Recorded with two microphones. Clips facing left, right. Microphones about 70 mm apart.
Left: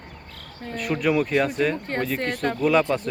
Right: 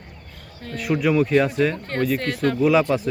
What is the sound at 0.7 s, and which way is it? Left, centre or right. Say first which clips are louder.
Speech: right 3 dB; centre.